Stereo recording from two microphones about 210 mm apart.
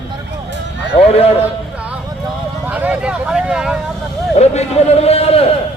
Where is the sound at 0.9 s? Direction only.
30° left (ahead or behind).